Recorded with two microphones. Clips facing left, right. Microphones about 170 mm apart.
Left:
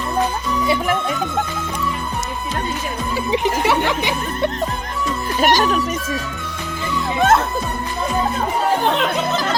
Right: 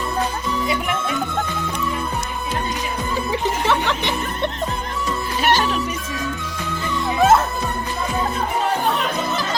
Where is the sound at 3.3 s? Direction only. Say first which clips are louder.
Left 3 dB; 15° left (ahead or behind).